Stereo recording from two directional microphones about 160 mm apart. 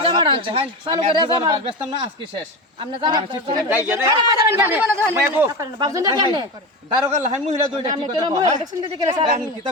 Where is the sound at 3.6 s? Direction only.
15° right (ahead or behind).